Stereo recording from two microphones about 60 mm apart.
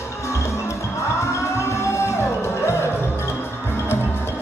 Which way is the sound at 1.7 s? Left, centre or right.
Left.